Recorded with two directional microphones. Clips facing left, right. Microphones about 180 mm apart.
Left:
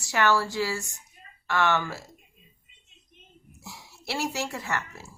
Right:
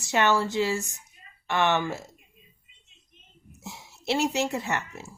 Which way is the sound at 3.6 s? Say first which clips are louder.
Right 4 dB; 20° right (ahead or behind).